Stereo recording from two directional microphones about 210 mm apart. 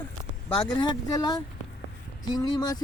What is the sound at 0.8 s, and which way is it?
Speech, 20° left (ahead or behind).